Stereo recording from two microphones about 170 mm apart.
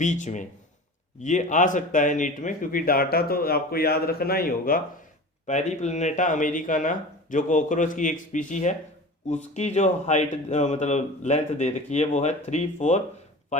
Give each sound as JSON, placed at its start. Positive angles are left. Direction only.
{"t": 0.0, "sound": "a man's voice", "side_deg": 45}
{"t": 5.5, "sound": "speech", "side_deg": 45}